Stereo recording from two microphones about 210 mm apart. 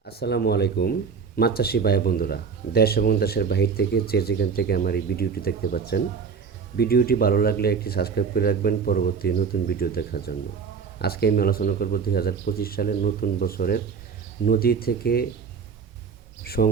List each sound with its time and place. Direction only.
0.2 s speech: 50° left (ahead or behind)
16.4 s speech: 50° left (ahead or behind)